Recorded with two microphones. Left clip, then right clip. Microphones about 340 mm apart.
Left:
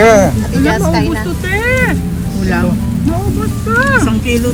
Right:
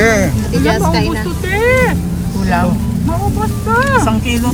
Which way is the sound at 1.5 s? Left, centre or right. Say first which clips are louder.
Right 2 dB; right.